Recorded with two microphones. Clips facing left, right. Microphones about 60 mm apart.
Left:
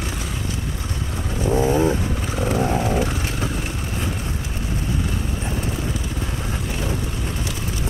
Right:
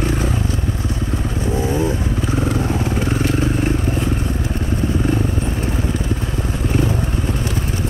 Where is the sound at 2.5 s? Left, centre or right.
Left.